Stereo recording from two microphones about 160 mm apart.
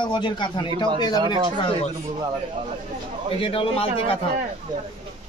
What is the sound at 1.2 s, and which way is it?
Speech, 30° right (ahead or behind).